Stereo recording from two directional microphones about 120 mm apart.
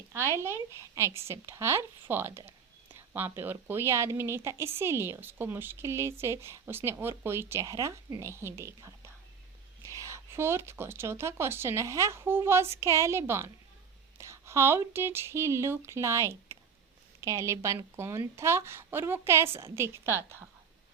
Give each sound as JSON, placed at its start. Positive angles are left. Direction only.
{"t": 0.3, "sound": "speech", "side_deg": -20}